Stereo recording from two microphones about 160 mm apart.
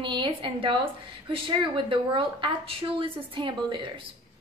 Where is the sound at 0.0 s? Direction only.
30° right (ahead or behind).